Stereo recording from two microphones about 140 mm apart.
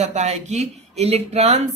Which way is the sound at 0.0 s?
50° right (ahead or behind).